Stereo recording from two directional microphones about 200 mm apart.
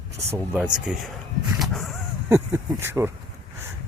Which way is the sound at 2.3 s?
10° right (ahead or behind).